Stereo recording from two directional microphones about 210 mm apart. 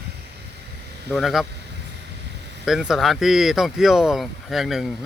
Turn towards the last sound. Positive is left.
turn(degrees=0)  # may be behind; listen again after turning